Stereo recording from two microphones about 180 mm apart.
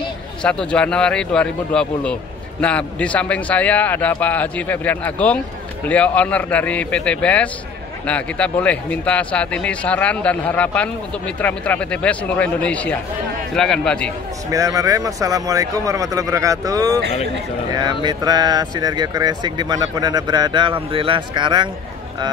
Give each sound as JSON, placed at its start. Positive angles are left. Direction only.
{"t": 0.4, "sound": "a man's voice", "side_deg": 5}
{"t": 14.5, "sound": "speech", "side_deg": -20}